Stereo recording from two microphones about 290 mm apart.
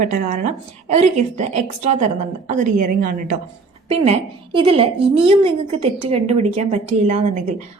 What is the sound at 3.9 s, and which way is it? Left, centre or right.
A woman's voice, centre.